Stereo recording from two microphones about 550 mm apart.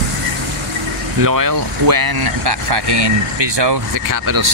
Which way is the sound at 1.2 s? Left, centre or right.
Right.